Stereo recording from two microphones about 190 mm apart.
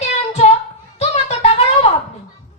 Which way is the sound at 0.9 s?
35° left (ahead or behind).